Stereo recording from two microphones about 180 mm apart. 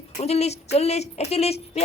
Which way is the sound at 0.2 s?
35° left (ahead or behind).